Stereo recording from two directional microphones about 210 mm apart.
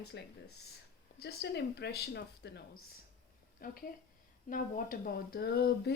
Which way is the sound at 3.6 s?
45° left (ahead or behind).